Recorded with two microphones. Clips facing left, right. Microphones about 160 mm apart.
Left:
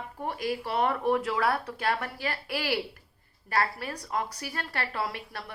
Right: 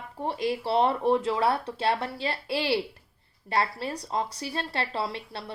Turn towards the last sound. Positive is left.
turn(degrees=-25)  # may be behind; listen again after turning